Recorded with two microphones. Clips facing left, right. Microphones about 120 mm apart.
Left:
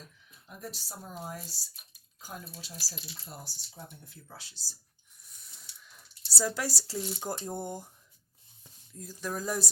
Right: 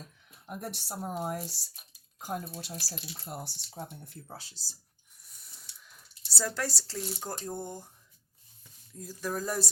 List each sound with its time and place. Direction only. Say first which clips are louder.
0.3 s speech: right 5 dB; 55° right (ahead or behind)
4.4 s speech: right 3 dB; 45° right (ahead or behind)
5.8 s speech: even; centre (ahead or behind)
9.0 s speech: right 2 dB; 5° right (ahead or behind)